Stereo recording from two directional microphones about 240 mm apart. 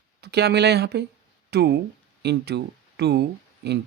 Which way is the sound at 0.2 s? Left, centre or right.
Right.